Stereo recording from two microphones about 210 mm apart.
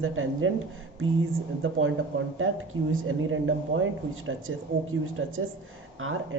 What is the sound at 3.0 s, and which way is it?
Speech, 70° right (ahead or behind).